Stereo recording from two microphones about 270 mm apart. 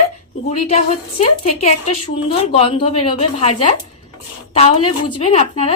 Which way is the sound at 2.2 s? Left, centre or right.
Left.